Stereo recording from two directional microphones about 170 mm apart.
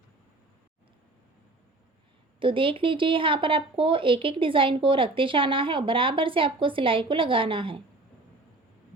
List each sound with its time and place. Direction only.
2.4 s speech: 30° right (ahead or behind)